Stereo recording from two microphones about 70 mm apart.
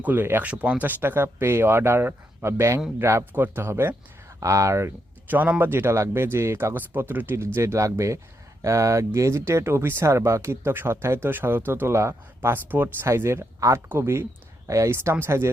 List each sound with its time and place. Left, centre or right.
0.0 s speech: right
3.3 s speech: right
4.4 s speech: right
5.3 s speech: right
6.7 s speech: right
13.1 s speech: right
13.6 s speech: right